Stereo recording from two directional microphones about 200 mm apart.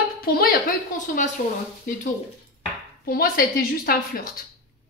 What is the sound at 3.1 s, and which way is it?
Speech, 45° left (ahead or behind).